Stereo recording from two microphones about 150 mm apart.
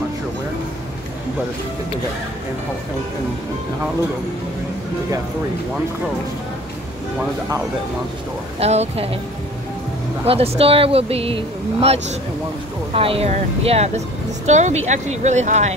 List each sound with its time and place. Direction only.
8.5 s speech: 45° right (ahead or behind)
10.2 s speech: 40° right (ahead or behind)